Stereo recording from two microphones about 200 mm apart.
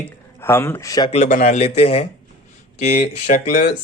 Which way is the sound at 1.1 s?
35° left (ahead or behind).